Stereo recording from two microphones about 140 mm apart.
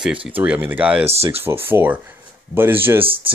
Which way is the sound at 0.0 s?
10° right (ahead or behind).